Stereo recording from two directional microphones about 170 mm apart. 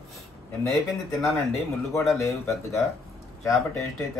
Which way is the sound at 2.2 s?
15° left (ahead or behind).